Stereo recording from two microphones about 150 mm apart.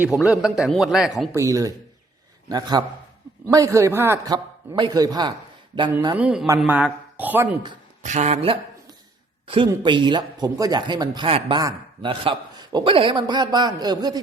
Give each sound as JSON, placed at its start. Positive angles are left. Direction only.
{"t": 0.0, "sound": "a man's voice", "side_deg": 0}
{"t": 1.3, "sound": "a man's voice", "side_deg": -20}
{"t": 6.1, "sound": "a man's voice", "side_deg": -5}
{"t": 8.0, "sound": "speech", "side_deg": -50}
{"t": 9.5, "sound": "a man's voice", "side_deg": -35}